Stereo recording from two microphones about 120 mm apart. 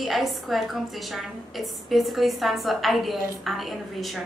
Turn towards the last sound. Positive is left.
turn(degrees=0)  # may be behind; listen again after turning